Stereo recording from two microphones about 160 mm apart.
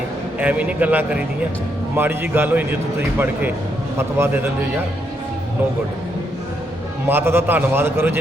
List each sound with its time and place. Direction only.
0.3 s a man's voice: 10° right (ahead or behind)
3.9 s a man's voice: 15° right (ahead or behind)
7.1 s a man's voice: 15° right (ahead or behind)